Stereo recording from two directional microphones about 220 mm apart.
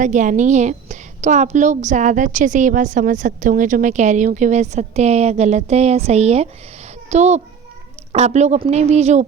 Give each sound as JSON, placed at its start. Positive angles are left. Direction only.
{"t": 0.0, "sound": "a woman's voice", "side_deg": -35}